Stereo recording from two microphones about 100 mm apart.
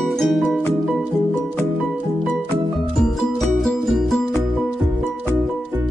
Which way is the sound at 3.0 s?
5° left (ahead or behind).